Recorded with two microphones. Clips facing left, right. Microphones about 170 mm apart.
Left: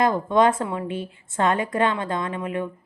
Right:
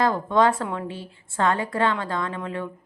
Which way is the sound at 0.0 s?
15° left (ahead or behind).